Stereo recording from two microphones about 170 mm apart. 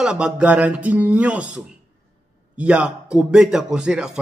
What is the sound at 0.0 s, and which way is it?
A man's voice, 5° right (ahead or behind).